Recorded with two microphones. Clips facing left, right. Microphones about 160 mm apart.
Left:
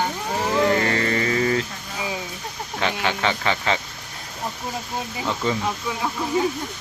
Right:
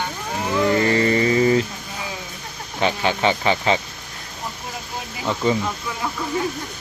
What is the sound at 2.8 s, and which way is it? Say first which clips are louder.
Speech: right 4 dB; 15° right (ahead or behind).